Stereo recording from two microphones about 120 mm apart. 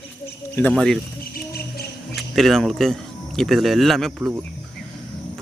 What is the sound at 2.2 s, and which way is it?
Speech, centre (ahead or behind).